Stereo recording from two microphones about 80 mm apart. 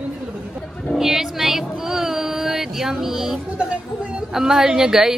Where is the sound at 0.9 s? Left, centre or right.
Centre.